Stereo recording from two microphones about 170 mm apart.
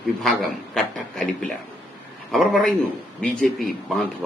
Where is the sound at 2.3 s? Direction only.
Centre (ahead or behind).